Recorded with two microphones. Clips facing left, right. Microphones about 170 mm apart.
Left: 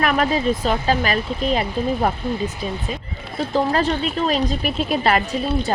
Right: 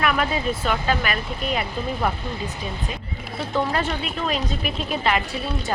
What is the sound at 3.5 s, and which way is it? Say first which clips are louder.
A woman's voice: left 4 dB; 35° left (ahead or behind).